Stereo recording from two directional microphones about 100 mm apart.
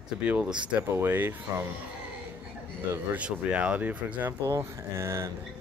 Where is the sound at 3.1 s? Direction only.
15° right (ahead or behind).